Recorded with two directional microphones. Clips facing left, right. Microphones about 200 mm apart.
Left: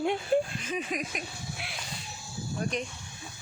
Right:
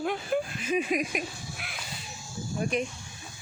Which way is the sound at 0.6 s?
10° right (ahead or behind).